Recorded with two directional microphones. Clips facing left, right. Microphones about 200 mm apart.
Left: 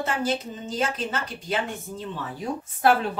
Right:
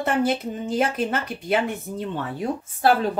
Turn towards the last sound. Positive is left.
turn(degrees=-30)  # may be behind; listen again after turning